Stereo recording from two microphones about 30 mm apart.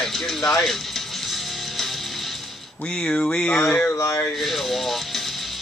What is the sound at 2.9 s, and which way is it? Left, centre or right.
Speech, left.